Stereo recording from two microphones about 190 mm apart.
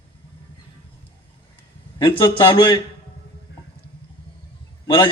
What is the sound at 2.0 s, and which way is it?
Speech, 25° left (ahead or behind).